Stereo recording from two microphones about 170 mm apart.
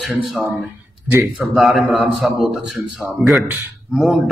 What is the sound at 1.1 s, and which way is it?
Speech, 10° right (ahead or behind).